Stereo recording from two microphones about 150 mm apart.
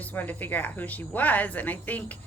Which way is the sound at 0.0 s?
10° left (ahead or behind).